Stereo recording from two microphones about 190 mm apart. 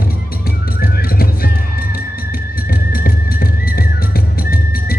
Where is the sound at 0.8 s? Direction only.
50° left (ahead or behind).